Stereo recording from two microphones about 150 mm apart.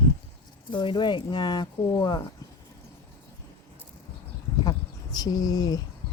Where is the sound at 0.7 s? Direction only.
30° left (ahead or behind).